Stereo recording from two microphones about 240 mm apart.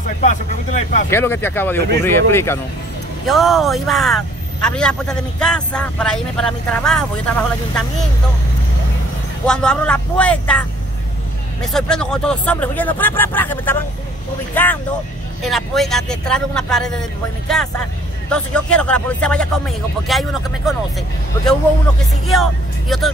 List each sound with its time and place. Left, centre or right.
0.2 s speech: left
1.1 s speech: centre
3.3 s speech: centre
9.5 s speech: centre
11.6 s speech: centre
22.2 s speech: centre